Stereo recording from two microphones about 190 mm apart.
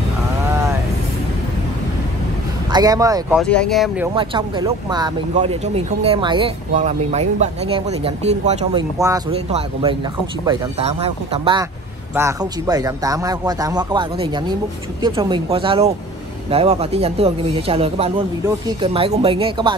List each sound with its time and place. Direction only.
2.7 s speech: 20° right (ahead or behind)
3.3 s speech: 5° left (ahead or behind)
4.1 s speech: 25° right (ahead or behind)
5.3 s speech: 35° right (ahead or behind)
6.7 s speech: 40° right (ahead or behind)
8.9 s speech: 15° right (ahead or behind)
9.3 s speech: 30° right (ahead or behind)
12.2 s speech: 15° right (ahead or behind)